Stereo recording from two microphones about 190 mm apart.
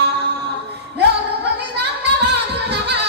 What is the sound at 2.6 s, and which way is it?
Music, 60° right (ahead or behind).